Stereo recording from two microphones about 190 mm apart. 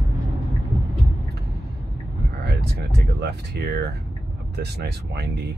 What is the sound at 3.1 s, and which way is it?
Speech, 60° right (ahead or behind).